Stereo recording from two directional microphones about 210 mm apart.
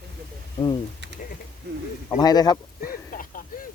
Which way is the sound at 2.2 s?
20° left (ahead or behind).